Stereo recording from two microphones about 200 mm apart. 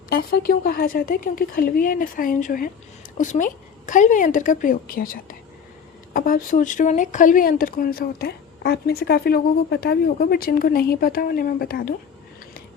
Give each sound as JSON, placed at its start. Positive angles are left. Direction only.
{"t": 0.1, "sound": "a woman's voice", "side_deg": 50}